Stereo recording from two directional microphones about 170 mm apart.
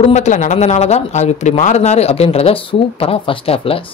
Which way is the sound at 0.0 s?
40° left (ahead or behind).